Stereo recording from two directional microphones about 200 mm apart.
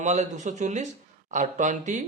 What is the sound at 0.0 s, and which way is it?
Speech, 35° right (ahead or behind).